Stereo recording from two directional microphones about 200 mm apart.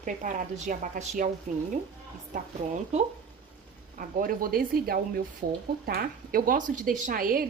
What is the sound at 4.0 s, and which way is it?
A woman's voice, 45° right (ahead or behind).